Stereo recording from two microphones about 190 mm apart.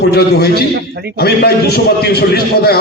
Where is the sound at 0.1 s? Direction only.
55° left (ahead or behind).